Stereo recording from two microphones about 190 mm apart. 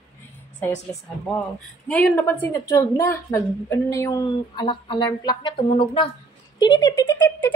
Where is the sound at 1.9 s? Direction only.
5° left (ahead or behind); by 6.0 s 25° left (ahead or behind).